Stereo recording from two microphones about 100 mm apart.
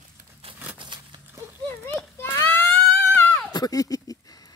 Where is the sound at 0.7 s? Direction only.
50° right (ahead or behind).